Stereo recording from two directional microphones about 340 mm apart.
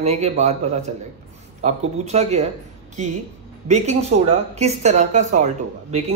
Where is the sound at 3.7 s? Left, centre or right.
Centre.